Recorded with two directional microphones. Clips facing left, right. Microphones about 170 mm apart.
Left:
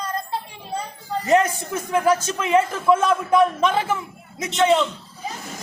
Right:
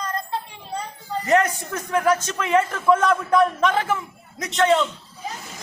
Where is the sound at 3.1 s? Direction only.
25° left (ahead or behind).